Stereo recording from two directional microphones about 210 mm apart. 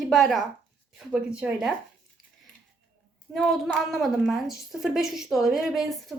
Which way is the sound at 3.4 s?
Centre (ahead or behind).